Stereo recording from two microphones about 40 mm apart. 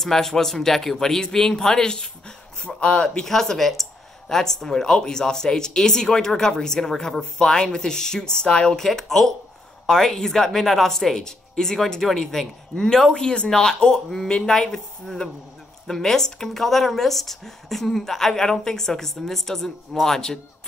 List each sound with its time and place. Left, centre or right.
0.0 s speech: centre; by 3.3 s left
3.3 s speech: centre